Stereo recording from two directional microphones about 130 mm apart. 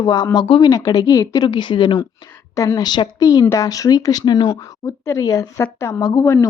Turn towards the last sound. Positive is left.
turn(degrees=20)  # may be behind; listen again after turning